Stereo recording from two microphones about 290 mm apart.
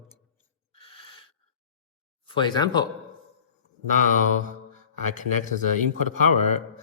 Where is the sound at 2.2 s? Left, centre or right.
Centre.